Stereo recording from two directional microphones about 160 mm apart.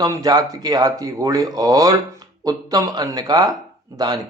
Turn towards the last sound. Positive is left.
turn(degrees=-25)  # may be behind; listen again after turning